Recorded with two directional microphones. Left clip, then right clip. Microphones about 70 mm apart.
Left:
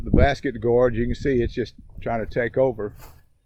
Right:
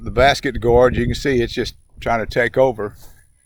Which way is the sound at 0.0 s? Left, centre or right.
Right.